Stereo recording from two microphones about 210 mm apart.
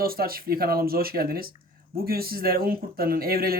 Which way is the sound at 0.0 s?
45° right (ahead or behind).